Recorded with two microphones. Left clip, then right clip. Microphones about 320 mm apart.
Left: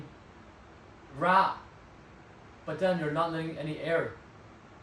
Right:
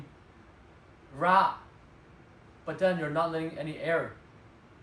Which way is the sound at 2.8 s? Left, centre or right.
Centre.